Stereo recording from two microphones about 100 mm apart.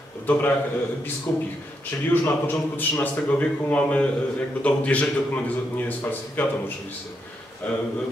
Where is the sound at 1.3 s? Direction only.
15° left (ahead or behind).